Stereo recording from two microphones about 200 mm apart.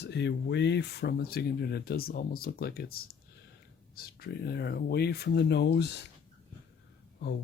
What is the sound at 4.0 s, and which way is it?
Speech, 50° left (ahead or behind).